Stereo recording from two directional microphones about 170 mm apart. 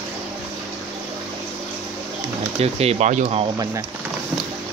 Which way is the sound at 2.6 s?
35° right (ahead or behind).